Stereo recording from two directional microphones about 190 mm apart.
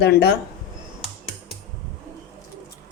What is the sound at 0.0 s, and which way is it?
Speech, 55° left (ahead or behind).